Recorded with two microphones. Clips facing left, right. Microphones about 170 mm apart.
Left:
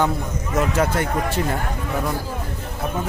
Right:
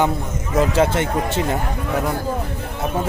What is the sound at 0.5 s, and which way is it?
Speech, 30° right (ahead or behind).